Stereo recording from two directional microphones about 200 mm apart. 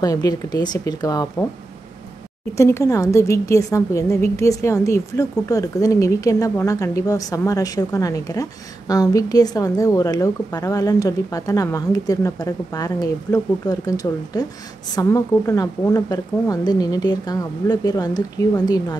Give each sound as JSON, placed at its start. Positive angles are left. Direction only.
{"t": 0.0, "sound": "speech", "side_deg": 20}
{"t": 2.5, "sound": "a woman's voice", "side_deg": 15}